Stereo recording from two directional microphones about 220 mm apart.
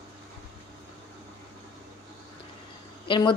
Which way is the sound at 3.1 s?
20° left (ahead or behind).